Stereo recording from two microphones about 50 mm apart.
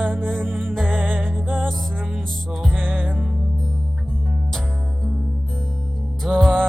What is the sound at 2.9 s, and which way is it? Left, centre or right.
Music, right.